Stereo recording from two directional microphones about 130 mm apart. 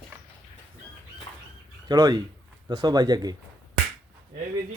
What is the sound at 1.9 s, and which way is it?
Speech, 30° right (ahead or behind).